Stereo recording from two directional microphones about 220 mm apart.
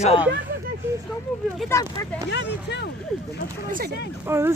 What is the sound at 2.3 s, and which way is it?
Speech, 50° left (ahead or behind).